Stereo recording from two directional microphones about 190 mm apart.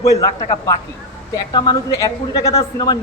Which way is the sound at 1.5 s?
20° left (ahead or behind).